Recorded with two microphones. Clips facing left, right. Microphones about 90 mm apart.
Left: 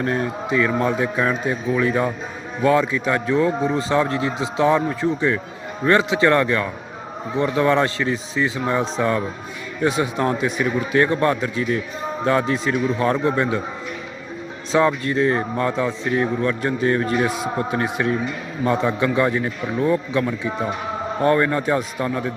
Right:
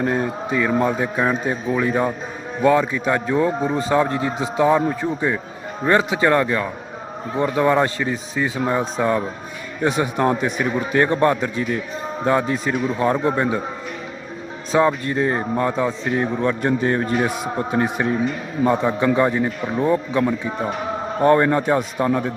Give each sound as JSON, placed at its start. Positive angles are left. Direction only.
{"t": 0.0, "sound": "a man's voice", "side_deg": -25}
{"t": 14.7, "sound": "a man's voice", "side_deg": -20}